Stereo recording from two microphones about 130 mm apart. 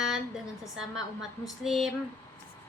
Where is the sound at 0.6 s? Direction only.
5° right (ahead or behind).